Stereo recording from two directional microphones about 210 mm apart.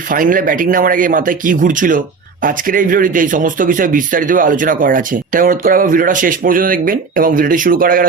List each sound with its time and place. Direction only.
0.1 s speech: 40° right (ahead or behind)